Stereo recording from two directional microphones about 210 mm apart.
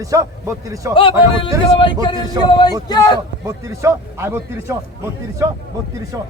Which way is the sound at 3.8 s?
10° right (ahead or behind).